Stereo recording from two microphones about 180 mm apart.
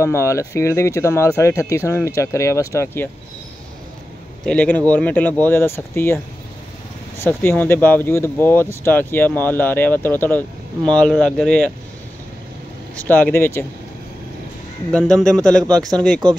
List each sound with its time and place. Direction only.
0.0 s speech: 15° left (ahead or behind)
4.5 s speech: 10° left (ahead or behind)
12.9 s speech: 10° left (ahead or behind)
14.9 s speech: 5° left (ahead or behind)
15.9 s speech: 20° right (ahead or behind)